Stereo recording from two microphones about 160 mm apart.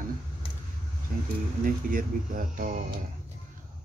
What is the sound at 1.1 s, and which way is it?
Speech, 60° right (ahead or behind).